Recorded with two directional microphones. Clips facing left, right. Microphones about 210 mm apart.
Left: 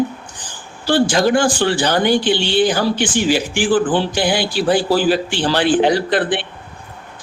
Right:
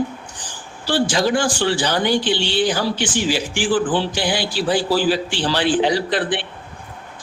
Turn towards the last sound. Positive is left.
turn(degrees=55)  # may be behind; listen again after turning